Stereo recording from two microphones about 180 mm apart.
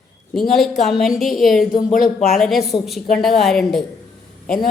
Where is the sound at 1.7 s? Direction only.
50° left (ahead or behind).